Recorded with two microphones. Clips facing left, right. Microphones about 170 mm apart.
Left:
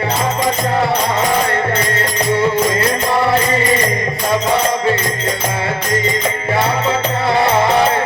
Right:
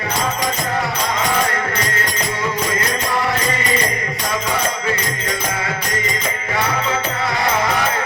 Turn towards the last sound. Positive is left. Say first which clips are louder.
# left 6 dB
turn(degrees=30)  # may be behind; listen again after turning